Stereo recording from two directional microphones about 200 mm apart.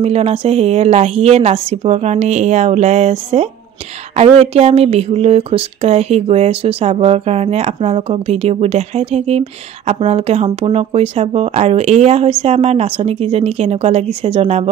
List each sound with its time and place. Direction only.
0.0 s speech: 30° right (ahead or behind)